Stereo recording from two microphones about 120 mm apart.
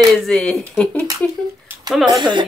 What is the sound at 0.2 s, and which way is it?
Speech, 5° left (ahead or behind).